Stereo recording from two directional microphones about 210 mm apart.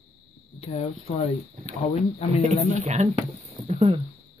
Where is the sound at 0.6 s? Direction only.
30° left (ahead or behind).